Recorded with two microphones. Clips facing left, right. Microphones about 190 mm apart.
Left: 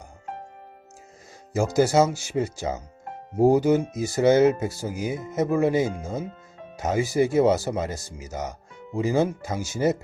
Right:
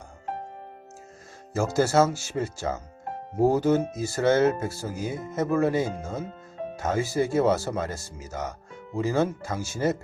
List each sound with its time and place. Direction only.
1.5 s speech: 15° left (ahead or behind)